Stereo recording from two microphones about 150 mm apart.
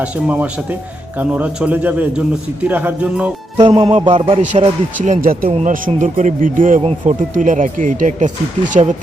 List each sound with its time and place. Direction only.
0.0 s speech: 10° right (ahead or behind)
3.6 s speech: 40° right (ahead or behind); by 9.0 s 55° right (ahead or behind)